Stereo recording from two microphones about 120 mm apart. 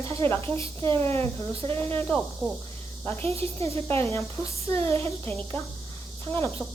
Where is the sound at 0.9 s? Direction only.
20° left (ahead or behind).